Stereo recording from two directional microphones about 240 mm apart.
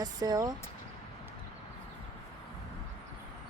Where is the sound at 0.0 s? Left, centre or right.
Centre.